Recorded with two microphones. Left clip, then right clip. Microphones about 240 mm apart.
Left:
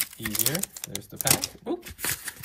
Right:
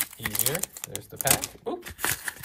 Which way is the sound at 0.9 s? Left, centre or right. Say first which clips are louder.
Even; centre.